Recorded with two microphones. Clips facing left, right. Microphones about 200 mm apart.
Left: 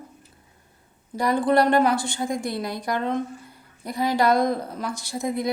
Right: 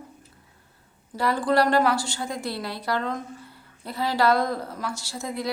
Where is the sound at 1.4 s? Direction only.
20° left (ahead or behind).